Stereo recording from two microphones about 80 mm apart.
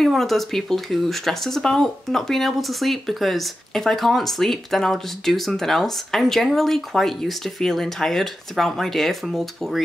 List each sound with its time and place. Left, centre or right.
0.0 s speech: centre